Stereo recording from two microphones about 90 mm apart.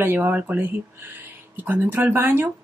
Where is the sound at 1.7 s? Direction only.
20° right (ahead or behind).